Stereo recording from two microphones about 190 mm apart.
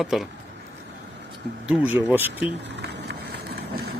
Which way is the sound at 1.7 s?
10° right (ahead or behind).